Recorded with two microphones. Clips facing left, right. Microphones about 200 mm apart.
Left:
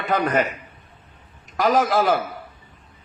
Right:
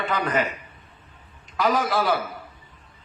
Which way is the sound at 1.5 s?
45° left (ahead or behind).